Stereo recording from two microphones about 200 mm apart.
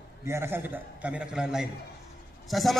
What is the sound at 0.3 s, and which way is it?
A man's voice, 10° right (ahead or behind).